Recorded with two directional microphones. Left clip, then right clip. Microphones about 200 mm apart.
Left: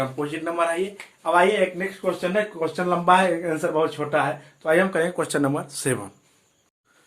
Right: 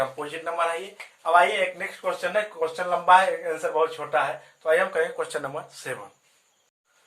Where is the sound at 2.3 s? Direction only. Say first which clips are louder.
Left 2 dB; 30° left (ahead or behind).